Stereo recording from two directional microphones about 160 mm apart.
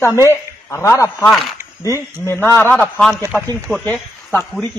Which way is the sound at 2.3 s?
15° left (ahead or behind).